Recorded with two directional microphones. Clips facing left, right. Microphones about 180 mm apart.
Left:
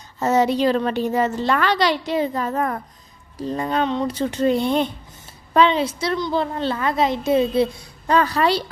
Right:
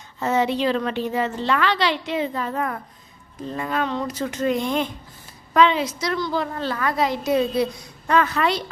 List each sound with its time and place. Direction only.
0.2 s a woman's voice: 40° left (ahead or behind)